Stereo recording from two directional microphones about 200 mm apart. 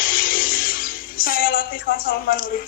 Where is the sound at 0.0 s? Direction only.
45° left (ahead or behind).